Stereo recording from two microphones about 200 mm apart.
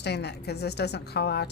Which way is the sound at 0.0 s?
55° left (ahead or behind).